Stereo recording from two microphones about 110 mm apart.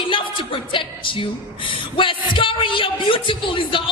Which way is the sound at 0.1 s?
50° left (ahead or behind).